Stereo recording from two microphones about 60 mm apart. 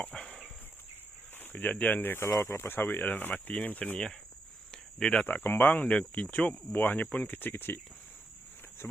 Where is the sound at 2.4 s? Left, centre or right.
Left.